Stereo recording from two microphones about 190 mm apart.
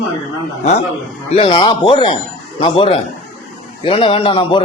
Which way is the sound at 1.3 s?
30° left (ahead or behind).